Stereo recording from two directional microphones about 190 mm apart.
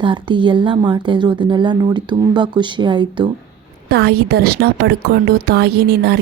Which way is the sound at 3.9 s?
55° right (ahead or behind).